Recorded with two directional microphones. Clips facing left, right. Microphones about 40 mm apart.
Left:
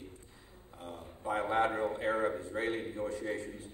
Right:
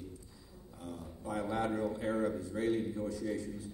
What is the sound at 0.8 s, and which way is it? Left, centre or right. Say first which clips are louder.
A man's voice: left 4 dB; left.